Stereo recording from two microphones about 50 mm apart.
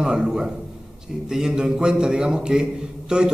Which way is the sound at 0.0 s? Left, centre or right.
Centre.